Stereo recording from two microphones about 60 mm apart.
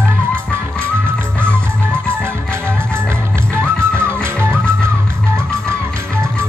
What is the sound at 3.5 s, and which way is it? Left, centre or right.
Music, right.